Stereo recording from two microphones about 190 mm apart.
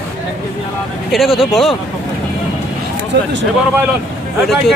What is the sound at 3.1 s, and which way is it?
Speech, 65° right (ahead or behind).